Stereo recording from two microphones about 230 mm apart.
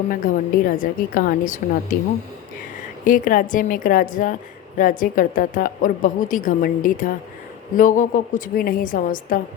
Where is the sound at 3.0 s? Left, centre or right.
Left.